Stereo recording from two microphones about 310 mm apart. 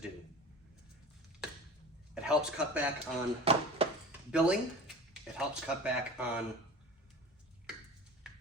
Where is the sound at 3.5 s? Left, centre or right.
Centre.